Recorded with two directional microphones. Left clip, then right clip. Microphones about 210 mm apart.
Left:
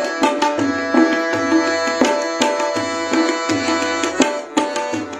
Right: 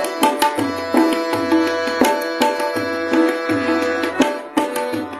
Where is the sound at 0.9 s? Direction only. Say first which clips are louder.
Even; 45° right (ahead or behind); by 2.4 s 25° right (ahead or behind).